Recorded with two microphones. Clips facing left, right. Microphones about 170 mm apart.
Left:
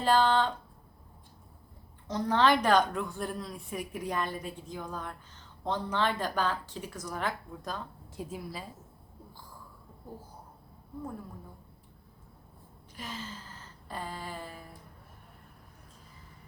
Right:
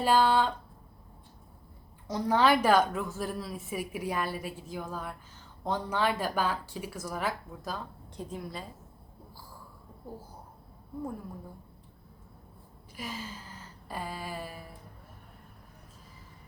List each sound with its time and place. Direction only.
0.0 s a woman's voice: 10° right (ahead or behind)
2.0 s a woman's voice: 10° right (ahead or behind)
13.0 s a sound: 10° right (ahead or behind)